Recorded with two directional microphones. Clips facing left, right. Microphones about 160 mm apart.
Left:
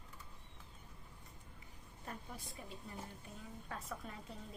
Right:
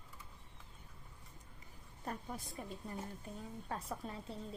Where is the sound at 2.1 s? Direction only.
40° right (ahead or behind).